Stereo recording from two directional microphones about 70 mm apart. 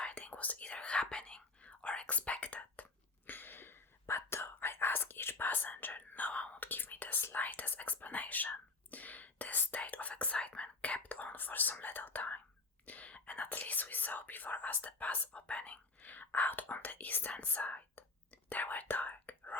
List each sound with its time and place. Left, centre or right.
0.0 s whispering: centre
3.2 s whispering: left